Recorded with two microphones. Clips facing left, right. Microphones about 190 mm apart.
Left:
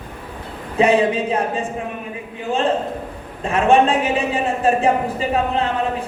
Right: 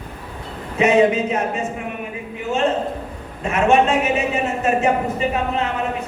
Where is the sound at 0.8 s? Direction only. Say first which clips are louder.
Right 1 dB; 30° left (ahead or behind).